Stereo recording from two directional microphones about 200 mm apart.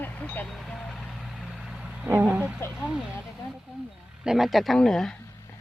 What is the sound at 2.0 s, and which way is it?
Speech, 10° right (ahead or behind).